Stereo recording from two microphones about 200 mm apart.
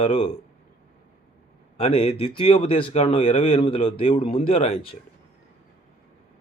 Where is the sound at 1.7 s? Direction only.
30° left (ahead or behind).